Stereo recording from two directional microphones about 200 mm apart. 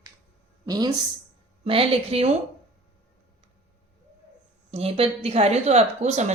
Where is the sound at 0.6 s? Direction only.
20° right (ahead or behind).